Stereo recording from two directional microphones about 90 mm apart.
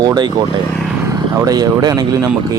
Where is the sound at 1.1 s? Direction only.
40° right (ahead or behind).